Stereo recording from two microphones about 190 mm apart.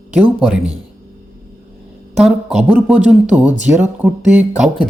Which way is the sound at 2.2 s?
Centre (ahead or behind).